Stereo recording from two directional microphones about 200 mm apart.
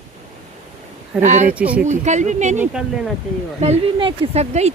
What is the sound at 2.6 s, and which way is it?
Speech, 5° right (ahead or behind).